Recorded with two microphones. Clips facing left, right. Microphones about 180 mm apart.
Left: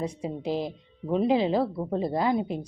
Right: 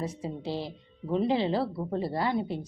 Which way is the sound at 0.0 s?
15° left (ahead or behind).